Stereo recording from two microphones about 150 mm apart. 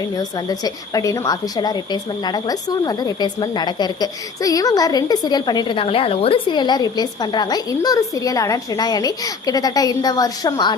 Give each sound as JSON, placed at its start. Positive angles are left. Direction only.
{"t": 0.2, "sound": "a woman's voice", "side_deg": 25}